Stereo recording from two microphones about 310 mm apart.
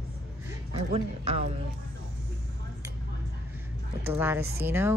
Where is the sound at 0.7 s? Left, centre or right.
Centre.